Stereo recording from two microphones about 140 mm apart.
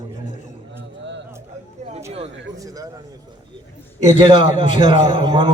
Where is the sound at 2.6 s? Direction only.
25° right (ahead or behind).